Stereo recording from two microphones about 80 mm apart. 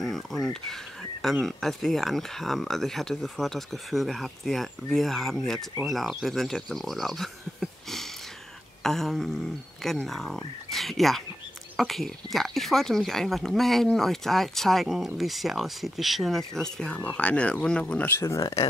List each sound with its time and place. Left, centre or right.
0.0 s a sound: centre
1.2 s speech: centre
18.0 s speech: left